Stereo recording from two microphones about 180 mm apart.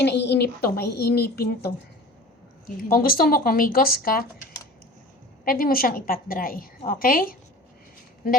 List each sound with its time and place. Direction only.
0.0 s a woman's voice: 70° left (ahead or behind)
2.9 s a woman's voice: 55° left (ahead or behind)
5.5 s a woman's voice: 55° left (ahead or behind)